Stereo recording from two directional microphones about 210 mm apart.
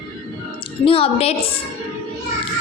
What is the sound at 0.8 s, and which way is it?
Speech, 25° left (ahead or behind).